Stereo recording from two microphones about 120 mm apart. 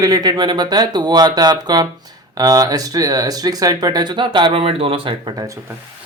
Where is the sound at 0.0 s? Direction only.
35° right (ahead or behind).